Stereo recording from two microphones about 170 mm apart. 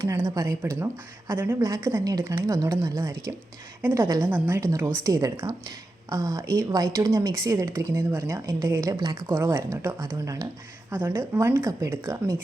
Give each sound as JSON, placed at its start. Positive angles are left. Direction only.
{"t": 0.0, "sound": "speech", "side_deg": -15}